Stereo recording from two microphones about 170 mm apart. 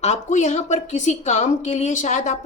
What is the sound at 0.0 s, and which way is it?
A woman's voice, 45° left (ahead or behind).